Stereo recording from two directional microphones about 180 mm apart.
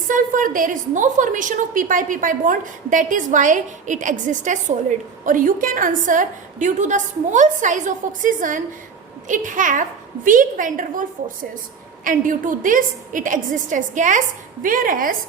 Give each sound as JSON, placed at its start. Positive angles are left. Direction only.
{"t": 0.1, "sound": "a woman's voice", "side_deg": -45}
{"t": 12.0, "sound": "a woman's voice", "side_deg": -50}